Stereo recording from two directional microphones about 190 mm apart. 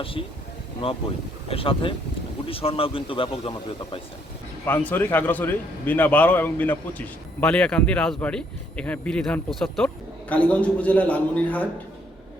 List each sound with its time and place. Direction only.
0.0 s a man's voice: 30° left (ahead or behind)
4.6 s a man's voice: 10° left (ahead or behind)